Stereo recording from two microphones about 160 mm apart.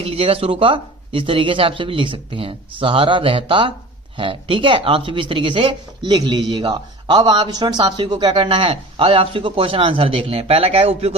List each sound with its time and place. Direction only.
0.0 s speech: 35° right (ahead or behind)